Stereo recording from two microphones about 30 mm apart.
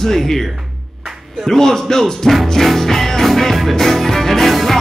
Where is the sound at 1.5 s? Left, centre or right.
Centre.